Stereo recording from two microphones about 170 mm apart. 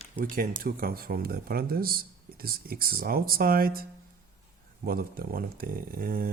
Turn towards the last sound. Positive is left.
turn(degrees=-60)  # may be behind; listen again after turning